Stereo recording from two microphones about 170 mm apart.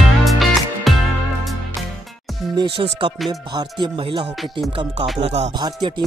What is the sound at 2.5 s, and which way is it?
Music, 30° right (ahead or behind).